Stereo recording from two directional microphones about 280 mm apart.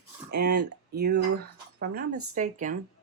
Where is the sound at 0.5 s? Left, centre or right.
Right.